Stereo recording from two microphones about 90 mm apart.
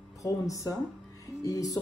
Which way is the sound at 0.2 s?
40° left (ahead or behind).